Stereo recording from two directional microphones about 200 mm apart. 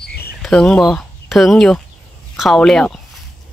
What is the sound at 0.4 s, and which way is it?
Speech, 5° left (ahead or behind).